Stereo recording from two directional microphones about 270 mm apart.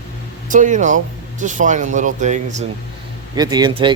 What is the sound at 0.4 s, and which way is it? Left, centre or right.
Speech, right.